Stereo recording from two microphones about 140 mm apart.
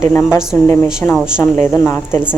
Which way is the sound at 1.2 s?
5° right (ahead or behind).